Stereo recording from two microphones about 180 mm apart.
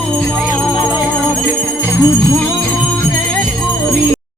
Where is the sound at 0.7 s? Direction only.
25° left (ahead or behind).